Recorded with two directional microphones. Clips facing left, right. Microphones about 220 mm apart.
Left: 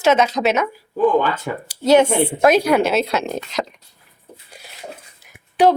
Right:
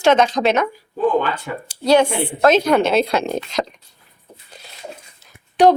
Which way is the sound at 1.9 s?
20° left (ahead or behind).